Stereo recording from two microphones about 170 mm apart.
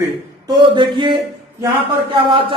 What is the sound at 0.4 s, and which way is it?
Speech, 25° right (ahead or behind).